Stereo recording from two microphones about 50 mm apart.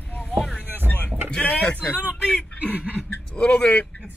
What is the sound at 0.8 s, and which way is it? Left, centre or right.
Vehicle, left.